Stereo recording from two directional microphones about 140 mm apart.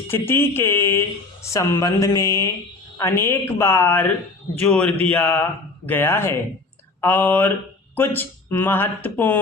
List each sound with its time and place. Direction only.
0.1 s speech: 15° left (ahead or behind)